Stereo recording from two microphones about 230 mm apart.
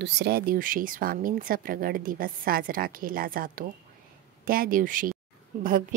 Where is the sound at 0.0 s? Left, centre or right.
Right.